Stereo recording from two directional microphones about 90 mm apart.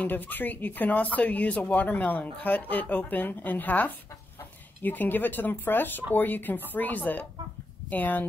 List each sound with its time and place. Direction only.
0.0 s speech: 20° left (ahead or behind)